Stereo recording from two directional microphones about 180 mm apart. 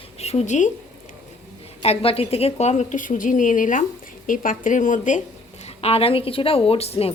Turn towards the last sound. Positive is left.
turn(degrees=35)  # may be behind; listen again after turning